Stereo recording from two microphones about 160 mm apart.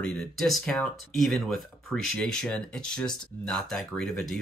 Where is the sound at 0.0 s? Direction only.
5° left (ahead or behind).